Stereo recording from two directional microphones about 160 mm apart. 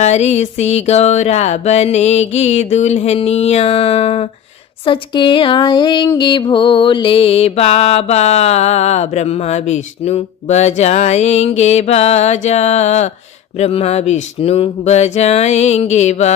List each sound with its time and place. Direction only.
0.0 s mantra: 45° left (ahead or behind)
4.9 s music: 30° left (ahead or behind)
6.5 s mantra: 35° left (ahead or behind)